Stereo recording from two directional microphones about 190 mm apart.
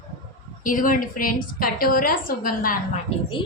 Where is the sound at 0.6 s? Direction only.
45° left (ahead or behind).